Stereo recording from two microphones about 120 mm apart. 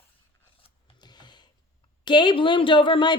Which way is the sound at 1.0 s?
35° left (ahead or behind).